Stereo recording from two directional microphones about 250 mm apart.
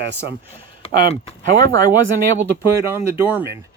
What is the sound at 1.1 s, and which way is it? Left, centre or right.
Speech, left.